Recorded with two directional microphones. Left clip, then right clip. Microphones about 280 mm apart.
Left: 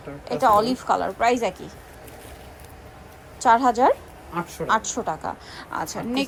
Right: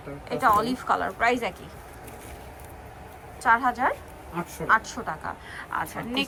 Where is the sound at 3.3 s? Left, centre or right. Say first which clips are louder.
Left 5 dB; left.